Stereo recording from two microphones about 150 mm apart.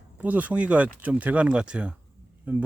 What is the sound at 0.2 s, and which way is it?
Speech, 10° right (ahead or behind).